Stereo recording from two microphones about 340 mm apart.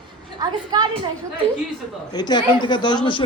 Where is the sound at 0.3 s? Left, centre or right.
Centre.